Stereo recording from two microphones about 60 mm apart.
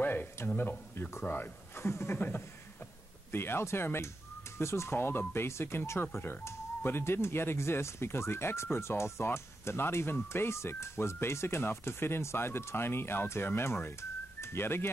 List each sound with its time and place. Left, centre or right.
0.0 s a sound: left
0.6 s speech: left
2.1 s speech: left